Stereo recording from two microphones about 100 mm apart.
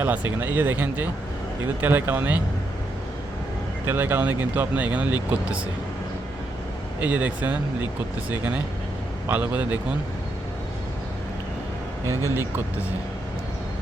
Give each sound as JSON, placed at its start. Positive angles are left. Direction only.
{"t": 0.0, "sound": "speech", "side_deg": -20}
{"t": 3.8, "sound": "speech", "side_deg": -20}
{"t": 7.0, "sound": "speech", "side_deg": -15}
{"t": 12.3, "sound": "speech", "side_deg": -20}